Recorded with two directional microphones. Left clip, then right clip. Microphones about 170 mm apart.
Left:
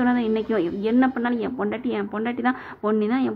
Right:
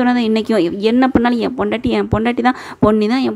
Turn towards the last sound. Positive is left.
turn(degrees=-45)  # may be behind; listen again after turning